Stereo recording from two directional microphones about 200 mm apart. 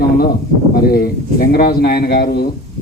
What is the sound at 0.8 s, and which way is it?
A man's voice, 50° left (ahead or behind).